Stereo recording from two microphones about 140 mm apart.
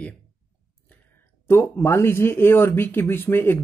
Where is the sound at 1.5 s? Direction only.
15° left (ahead or behind).